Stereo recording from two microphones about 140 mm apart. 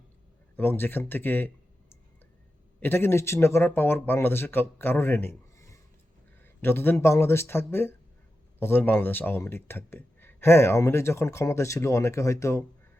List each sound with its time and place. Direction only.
0.5 s speech: 15° left (ahead or behind)
2.8 s speech: 15° left (ahead or behind)